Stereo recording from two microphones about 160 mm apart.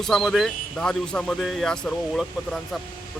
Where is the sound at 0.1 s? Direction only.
Centre (ahead or behind).